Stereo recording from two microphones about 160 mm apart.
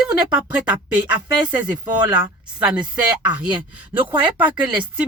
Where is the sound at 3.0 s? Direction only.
10° right (ahead or behind).